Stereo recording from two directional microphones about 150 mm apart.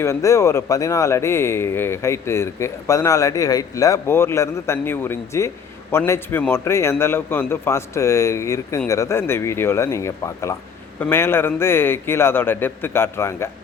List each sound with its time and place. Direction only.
0.0 s a man's voice: 20° left (ahead or behind)